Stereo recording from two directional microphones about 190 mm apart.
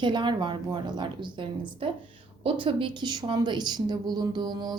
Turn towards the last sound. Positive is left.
turn(degrees=-20)  # may be behind; listen again after turning